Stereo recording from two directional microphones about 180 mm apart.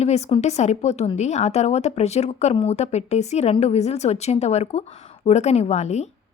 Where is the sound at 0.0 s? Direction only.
35° left (ahead or behind).